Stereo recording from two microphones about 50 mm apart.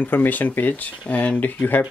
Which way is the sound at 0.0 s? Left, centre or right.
Left.